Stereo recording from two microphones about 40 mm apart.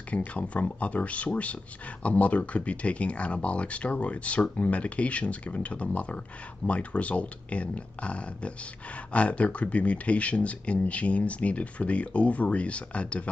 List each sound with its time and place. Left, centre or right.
0.1 s speech: left